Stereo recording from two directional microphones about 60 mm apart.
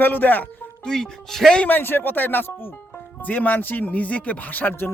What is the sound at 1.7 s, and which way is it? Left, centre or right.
Speech, left.